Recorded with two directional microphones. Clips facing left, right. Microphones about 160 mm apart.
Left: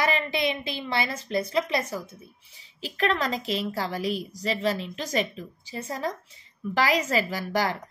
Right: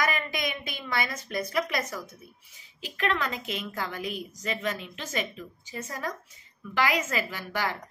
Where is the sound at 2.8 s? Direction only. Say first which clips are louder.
Left 3 dB; 35° left (ahead or behind).